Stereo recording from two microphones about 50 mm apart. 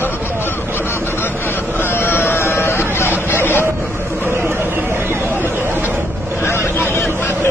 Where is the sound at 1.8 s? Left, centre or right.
Left.